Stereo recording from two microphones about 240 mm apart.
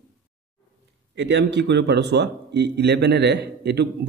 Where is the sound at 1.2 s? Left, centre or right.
Right.